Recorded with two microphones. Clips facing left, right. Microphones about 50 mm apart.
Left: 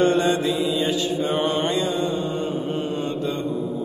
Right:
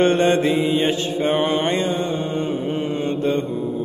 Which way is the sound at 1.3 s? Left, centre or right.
Centre.